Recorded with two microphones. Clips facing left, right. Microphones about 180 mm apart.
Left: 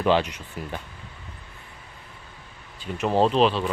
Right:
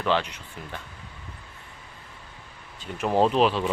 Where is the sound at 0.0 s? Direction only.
15° left (ahead or behind).